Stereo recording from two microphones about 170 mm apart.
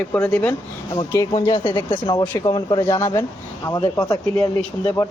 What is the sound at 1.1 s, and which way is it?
Speech, 20° left (ahead or behind).